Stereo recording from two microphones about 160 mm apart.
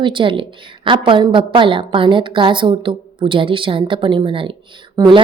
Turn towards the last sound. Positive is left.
turn(degrees=-30)  # may be behind; listen again after turning